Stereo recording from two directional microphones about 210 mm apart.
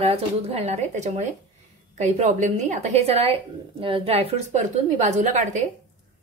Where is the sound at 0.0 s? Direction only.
30° right (ahead or behind).